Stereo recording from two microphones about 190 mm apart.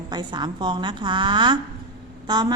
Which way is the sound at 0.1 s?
20° right (ahead or behind).